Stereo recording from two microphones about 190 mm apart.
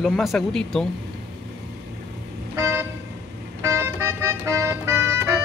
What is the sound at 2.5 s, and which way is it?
Vehicle, 15° right (ahead or behind).